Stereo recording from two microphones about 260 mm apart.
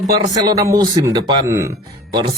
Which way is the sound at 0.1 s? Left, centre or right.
Centre.